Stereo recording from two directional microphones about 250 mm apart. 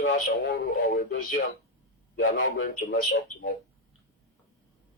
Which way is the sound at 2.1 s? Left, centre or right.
Left.